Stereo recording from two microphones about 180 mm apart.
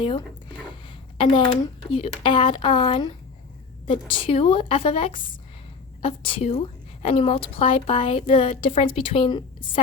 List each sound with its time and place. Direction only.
1.2 s a woman's voice: 25° left (ahead or behind)